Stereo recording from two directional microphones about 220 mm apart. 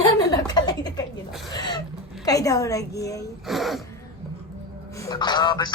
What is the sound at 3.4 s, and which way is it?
Speech, centre (ahead or behind).